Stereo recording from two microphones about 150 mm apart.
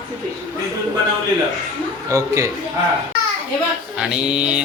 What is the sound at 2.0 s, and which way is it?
Speech, 20° right (ahead or behind).